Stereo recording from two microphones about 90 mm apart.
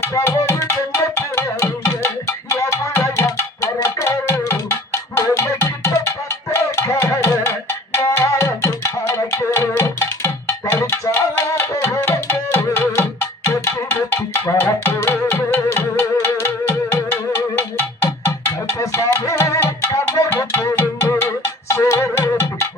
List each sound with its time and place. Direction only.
0.0 s music: 30° left (ahead or behind)
18.8 s music: 40° left (ahead or behind)